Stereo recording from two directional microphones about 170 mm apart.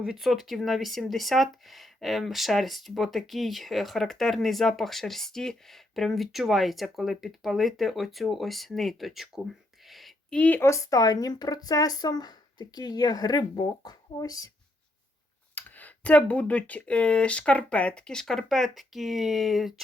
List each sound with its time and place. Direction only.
0.0 s speech: 5° right (ahead or behind); by 14.5 s 20° left (ahead or behind)
15.5 s speech: 10° left (ahead or behind)